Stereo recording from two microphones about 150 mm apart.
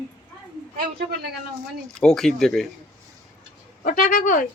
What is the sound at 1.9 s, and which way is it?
Speech, 5° left (ahead or behind).